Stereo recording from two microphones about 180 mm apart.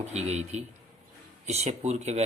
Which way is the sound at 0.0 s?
35° right (ahead or behind).